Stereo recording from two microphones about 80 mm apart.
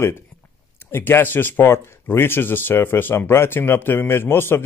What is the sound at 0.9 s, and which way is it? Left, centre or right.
Speech, left.